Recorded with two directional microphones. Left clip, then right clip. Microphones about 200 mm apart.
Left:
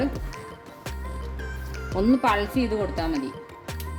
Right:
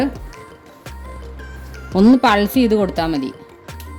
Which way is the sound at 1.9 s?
60° right (ahead or behind).